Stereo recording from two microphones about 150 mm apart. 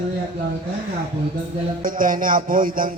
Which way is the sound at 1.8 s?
65° right (ahead or behind).